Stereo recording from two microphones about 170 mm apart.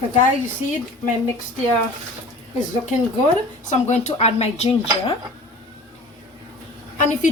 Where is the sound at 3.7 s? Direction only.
45° left (ahead or behind).